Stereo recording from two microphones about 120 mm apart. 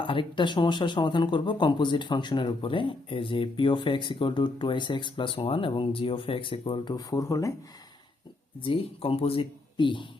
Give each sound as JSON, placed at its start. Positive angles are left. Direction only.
{"t": 0.0, "sound": "speech", "side_deg": 45}
{"t": 8.6, "sound": "speech", "side_deg": 50}